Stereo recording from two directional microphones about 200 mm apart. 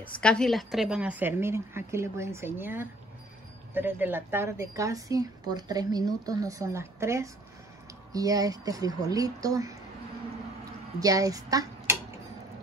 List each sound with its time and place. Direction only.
0.2 s a woman's voice: 5° left (ahead or behind); by 9.8 s 15° right (ahead or behind)
11.0 s speech: 15° right (ahead or behind)